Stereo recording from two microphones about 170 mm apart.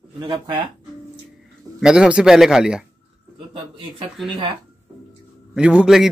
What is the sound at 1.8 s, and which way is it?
A man's voice, 5° right (ahead or behind).